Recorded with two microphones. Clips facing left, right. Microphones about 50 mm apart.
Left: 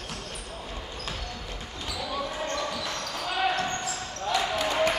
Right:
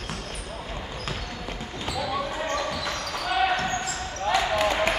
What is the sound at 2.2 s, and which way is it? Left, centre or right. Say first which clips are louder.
Basketball bounce: right 3 dB; centre.